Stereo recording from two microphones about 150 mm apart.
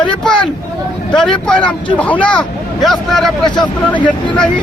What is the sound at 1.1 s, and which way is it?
Speech, 5° left (ahead or behind).